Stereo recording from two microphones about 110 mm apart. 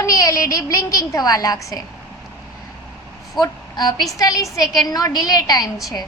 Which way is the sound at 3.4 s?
40° left (ahead or behind).